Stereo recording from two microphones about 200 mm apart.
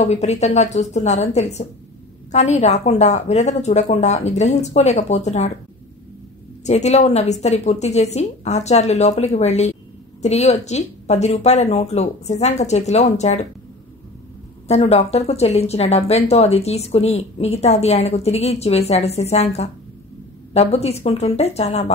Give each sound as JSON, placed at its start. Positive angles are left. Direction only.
{"t": 0.0, "sound": "speech", "side_deg": 35}
{"t": 6.6, "sound": "speech", "side_deg": 35}
{"t": 14.7, "sound": "speech", "side_deg": 30}